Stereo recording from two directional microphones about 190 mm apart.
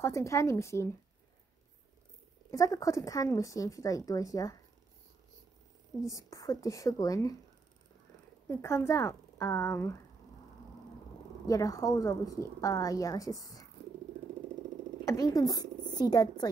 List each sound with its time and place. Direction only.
0.0 s a woman's voice: 15° left (ahead or behind)
2.5 s a woman's voice: 15° left (ahead or behind)
6.0 s a woman's voice: 15° left (ahead or behind)
8.5 s a woman's voice: 15° left (ahead or behind)
11.4 s a woman's voice: 20° left (ahead or behind)
15.0 s speech: 20° left (ahead or behind)